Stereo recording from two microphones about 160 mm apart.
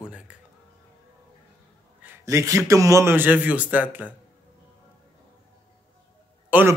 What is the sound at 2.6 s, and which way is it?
A man's voice, 20° right (ahead or behind).